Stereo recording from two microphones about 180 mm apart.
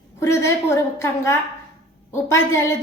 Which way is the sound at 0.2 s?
15° left (ahead or behind).